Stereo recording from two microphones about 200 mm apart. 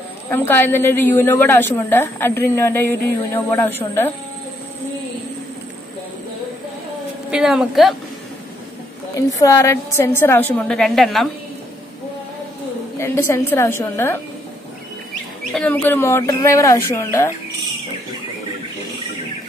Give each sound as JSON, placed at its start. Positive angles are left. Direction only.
{"t": 0.3, "sound": "a woman's voice", "side_deg": 10}
{"t": 7.2, "sound": "a woman's voice", "side_deg": -5}
{"t": 9.4, "sound": "a woman's voice", "side_deg": 15}
{"t": 13.0, "sound": "a woman's voice", "side_deg": 15}
{"t": 15.5, "sound": "a woman's voice", "side_deg": 5}